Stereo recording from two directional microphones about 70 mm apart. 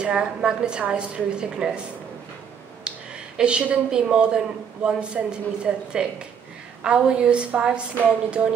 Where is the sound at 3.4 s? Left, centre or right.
Centre.